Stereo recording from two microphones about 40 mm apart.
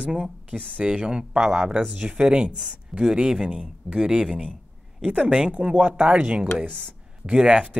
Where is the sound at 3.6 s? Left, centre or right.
Centre.